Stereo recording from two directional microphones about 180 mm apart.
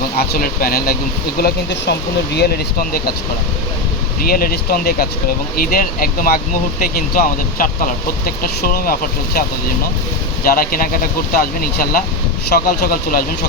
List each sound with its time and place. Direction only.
0.2 s speech: 55° left (ahead or behind)
4.2 s speech: 55° left (ahead or behind)
10.4 s speech: 55° left (ahead or behind)